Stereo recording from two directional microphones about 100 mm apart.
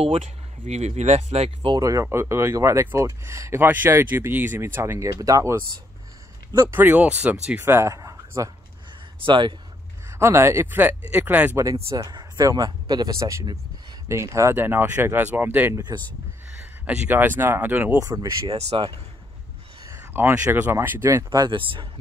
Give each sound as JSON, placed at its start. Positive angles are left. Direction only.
{"t": 0.7, "sound": "speech", "side_deg": -90}
{"t": 1.8, "sound": "speech", "side_deg": -35}
{"t": 6.7, "sound": "speech", "side_deg": -20}
{"t": 9.2, "sound": "speech", "side_deg": -55}
{"t": 10.1, "sound": "speech", "side_deg": -25}
{"t": 12.0, "sound": "speech", "side_deg": -45}
{"t": 15.7, "sound": "speech", "side_deg": -45}
{"t": 16.8, "sound": "speech", "side_deg": -15}
{"t": 17.9, "sound": "speech", "side_deg": -35}
{"t": 18.5, "sound": "speech", "side_deg": -90}
{"t": 19.8, "sound": "a sound", "side_deg": -30}
{"t": 20.7, "sound": "speech", "side_deg": -25}